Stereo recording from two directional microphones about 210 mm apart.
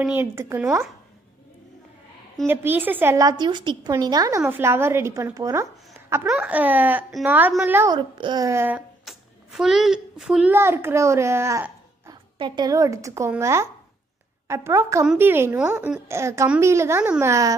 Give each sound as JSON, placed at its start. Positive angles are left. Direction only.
{"t": 0.0, "sound": "speech", "side_deg": -10}
{"t": 2.4, "sound": "a child's voice", "side_deg": -10}